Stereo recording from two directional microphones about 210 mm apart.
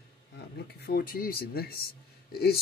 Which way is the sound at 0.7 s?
45° left (ahead or behind).